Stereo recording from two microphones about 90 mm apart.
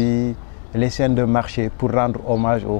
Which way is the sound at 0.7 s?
15° left (ahead or behind).